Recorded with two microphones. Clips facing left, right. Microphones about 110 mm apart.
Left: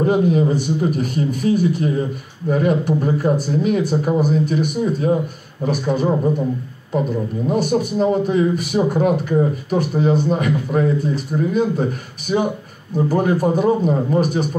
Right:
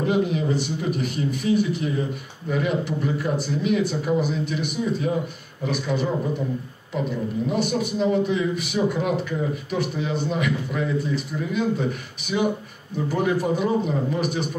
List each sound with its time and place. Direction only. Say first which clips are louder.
0.0 s a man's voice: left 6 dB; 40° left (ahead or behind)
7.4 s a man's voice: left 7 dB; 40° left (ahead or behind)